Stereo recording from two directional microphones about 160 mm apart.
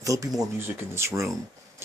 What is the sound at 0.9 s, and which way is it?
Speech, 15° right (ahead or behind).